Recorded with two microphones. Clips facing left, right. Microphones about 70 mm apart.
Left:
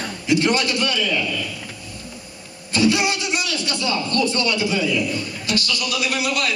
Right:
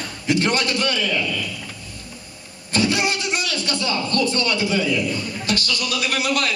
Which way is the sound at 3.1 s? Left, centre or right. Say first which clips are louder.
Left 1 dB; right.